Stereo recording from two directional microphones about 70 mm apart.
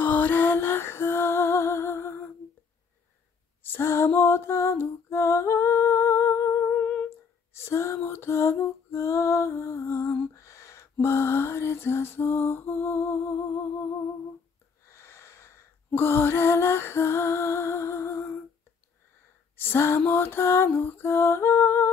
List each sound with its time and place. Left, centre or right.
0.0 s music: left
3.6 s music: left
7.5 s lullaby: left
8.0 s music: left
10.3 s lullaby: left
14.9 s a sound: left
19.5 s a sound: left
20.1 s lullaby: left